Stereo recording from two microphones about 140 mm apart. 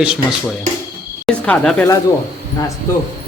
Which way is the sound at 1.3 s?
10° left (ahead or behind).